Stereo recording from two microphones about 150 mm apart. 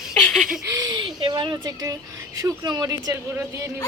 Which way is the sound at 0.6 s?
20° right (ahead or behind).